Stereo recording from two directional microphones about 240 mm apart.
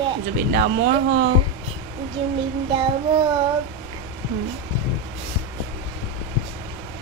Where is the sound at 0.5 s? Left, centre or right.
Right.